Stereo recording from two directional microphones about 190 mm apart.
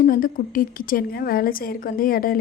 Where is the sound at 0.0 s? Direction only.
50° left (ahead or behind).